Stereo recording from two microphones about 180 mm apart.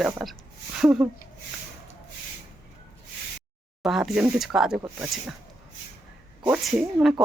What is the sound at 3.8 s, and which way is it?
Speech, centre (ahead or behind).